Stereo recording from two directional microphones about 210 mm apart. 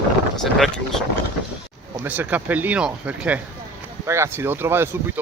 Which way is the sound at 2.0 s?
10° right (ahead or behind).